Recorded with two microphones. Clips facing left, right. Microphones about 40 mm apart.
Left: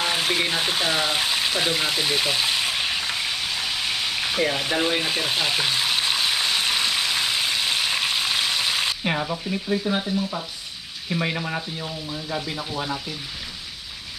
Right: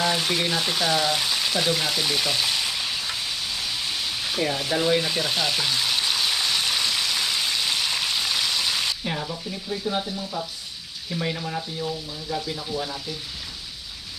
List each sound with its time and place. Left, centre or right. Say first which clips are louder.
0.0 s speech: left 1 dB; left
4.4 s frying: left 1 dB; left
9.0 s frying: left 4 dB; left
9.9 s frying: left 3 dB; left
11.1 s frying: left 3 dB; left